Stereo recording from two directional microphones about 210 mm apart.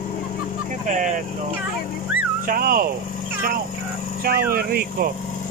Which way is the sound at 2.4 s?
45° right (ahead or behind).